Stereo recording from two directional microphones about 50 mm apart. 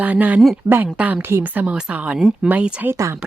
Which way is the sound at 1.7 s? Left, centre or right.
Centre.